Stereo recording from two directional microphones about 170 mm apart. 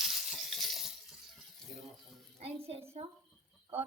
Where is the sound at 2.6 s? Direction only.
35° right (ahead or behind).